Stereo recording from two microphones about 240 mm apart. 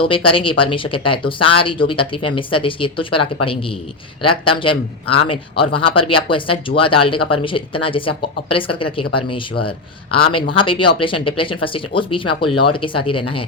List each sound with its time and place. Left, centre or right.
0.0 s speech: left